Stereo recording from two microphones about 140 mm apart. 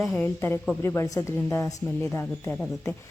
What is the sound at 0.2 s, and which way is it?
A woman's voice, 15° left (ahead or behind).